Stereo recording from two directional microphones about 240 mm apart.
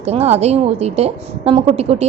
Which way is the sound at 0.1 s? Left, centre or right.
Right.